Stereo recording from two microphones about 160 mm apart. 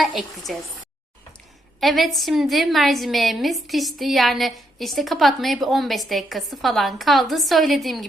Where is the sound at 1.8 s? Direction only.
Centre (ahead or behind).